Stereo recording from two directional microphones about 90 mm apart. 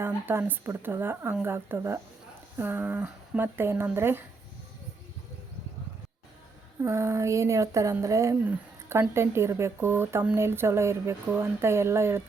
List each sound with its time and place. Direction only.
0.3 s speech: 25° right (ahead or behind)
6.8 s a sound: 30° right (ahead or behind)
8.9 s speech: 30° right (ahead or behind)